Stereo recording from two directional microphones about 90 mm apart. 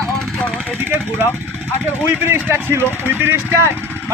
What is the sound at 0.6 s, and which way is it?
Speech, 25° right (ahead or behind).